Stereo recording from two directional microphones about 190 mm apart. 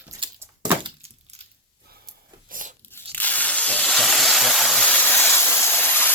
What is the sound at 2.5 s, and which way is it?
Biting, 45° right (ahead or behind).